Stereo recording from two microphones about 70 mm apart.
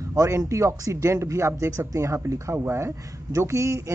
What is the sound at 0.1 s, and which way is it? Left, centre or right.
Speech, right.